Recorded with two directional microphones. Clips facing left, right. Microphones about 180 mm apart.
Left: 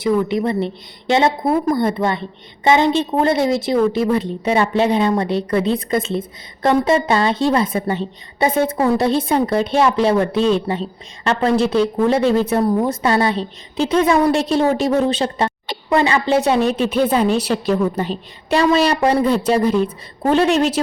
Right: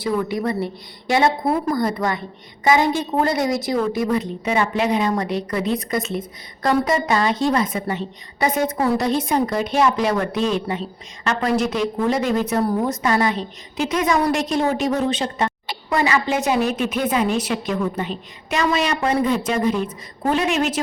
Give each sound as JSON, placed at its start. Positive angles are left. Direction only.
{"t": 0.0, "sound": "a woman's voice", "side_deg": 25}